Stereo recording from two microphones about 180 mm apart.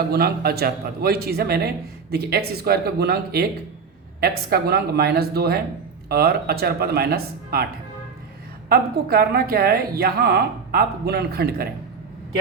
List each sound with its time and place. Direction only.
0.1 s a man's voice: 60° right (ahead or behind)
8.7 s a man's voice: 60° right (ahead or behind)